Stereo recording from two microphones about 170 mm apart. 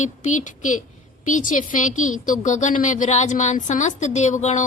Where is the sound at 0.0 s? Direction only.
45° left (ahead or behind).